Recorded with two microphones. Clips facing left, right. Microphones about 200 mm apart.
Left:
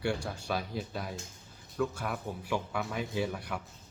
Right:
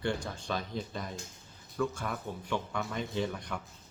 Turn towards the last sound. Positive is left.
turn(degrees=5)  # may be behind; listen again after turning